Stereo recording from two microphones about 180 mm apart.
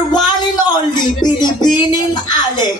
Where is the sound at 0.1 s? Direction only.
25° left (ahead or behind).